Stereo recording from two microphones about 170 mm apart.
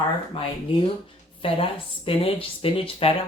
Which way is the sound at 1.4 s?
30° left (ahead or behind).